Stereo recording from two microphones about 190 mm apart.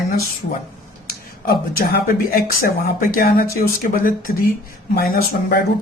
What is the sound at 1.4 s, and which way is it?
Speech, 50° left (ahead or behind).